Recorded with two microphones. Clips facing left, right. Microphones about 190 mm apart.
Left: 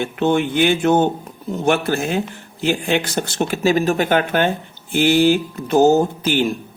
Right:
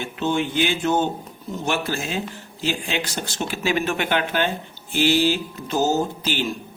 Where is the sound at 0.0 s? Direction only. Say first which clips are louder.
Left 6 dB; 55° left (ahead or behind).